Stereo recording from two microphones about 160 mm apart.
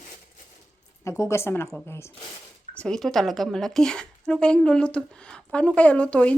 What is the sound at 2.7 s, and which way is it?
A woman's voice, 5° left (ahead or behind).